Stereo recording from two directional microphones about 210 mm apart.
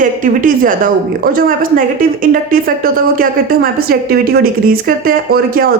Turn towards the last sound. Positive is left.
turn(degrees=-45)  # may be behind; listen again after turning